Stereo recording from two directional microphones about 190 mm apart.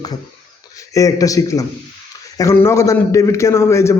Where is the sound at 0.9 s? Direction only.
20° left (ahead or behind).